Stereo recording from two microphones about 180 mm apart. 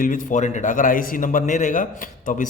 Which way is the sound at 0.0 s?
50° left (ahead or behind).